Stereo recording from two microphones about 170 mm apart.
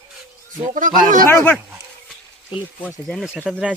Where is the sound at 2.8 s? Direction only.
10° left (ahead or behind).